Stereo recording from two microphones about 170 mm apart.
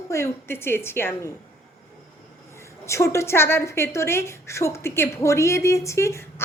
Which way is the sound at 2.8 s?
15° left (ahead or behind).